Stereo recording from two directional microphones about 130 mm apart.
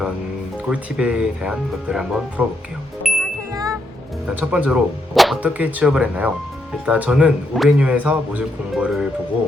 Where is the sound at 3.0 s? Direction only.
Centre (ahead or behind).